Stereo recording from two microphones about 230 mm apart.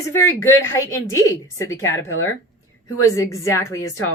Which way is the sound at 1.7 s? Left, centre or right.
Left.